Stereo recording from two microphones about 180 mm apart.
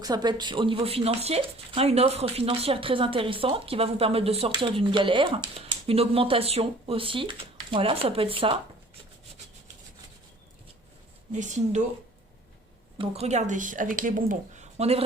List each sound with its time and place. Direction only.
0.0 s speech: 20° right (ahead or behind)
11.3 s a woman's voice: 40° right (ahead or behind)
13.0 s a woman's voice: 35° right (ahead or behind)